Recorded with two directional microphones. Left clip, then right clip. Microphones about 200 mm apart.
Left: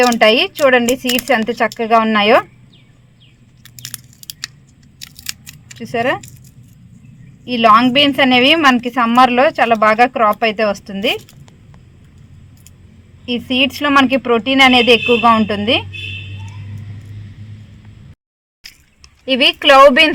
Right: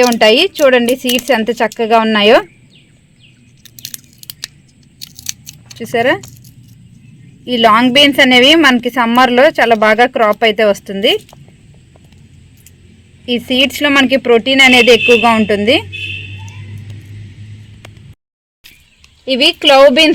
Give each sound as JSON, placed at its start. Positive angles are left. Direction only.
{"t": 0.0, "sound": "a woman's voice", "side_deg": -35}
{"t": 3.6, "sound": "biting", "side_deg": 0}
{"t": 5.8, "sound": "a woman's voice", "side_deg": -35}
{"t": 7.4, "sound": "a woman's voice", "side_deg": -35}
{"t": 13.2, "sound": "a woman's voice", "side_deg": -30}
{"t": 19.2, "sound": "a woman's voice", "side_deg": -40}